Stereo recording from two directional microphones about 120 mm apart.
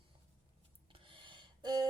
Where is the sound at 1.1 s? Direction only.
40° right (ahead or behind).